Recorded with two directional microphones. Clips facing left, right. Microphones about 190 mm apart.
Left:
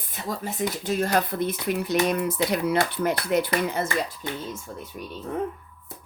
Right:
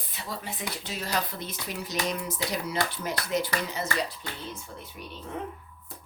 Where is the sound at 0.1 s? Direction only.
45° left (ahead or behind).